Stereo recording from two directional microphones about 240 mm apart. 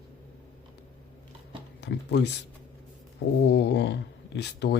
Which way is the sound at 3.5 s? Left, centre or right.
Left.